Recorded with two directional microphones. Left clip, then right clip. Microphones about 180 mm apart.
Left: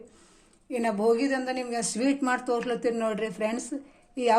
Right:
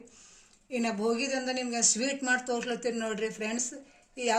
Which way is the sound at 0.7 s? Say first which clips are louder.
Left 6 dB; 35° left (ahead or behind).